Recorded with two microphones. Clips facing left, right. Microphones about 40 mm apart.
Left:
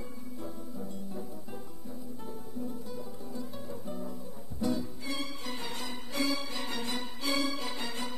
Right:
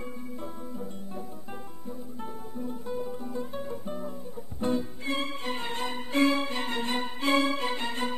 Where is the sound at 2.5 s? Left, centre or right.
Right.